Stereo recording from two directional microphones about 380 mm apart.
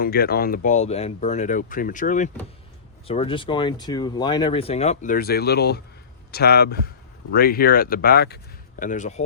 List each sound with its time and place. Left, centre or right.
0.0 s speech: left